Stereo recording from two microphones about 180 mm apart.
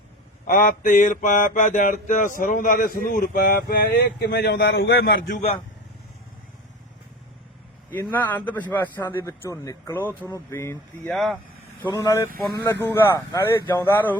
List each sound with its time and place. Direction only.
0.4 s mantra: 50° left (ahead or behind); by 5.3 s 70° left (ahead or behind)
7.9 s a man's voice: 10° left (ahead or behind)
11.1 s speech: centre (ahead or behind)
11.9 s a man's voice: 20° left (ahead or behind)